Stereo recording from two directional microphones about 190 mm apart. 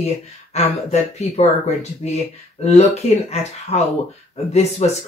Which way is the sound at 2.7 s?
35° left (ahead or behind).